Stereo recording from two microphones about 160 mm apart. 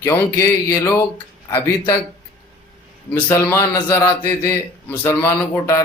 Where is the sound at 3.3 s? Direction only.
15° left (ahead or behind).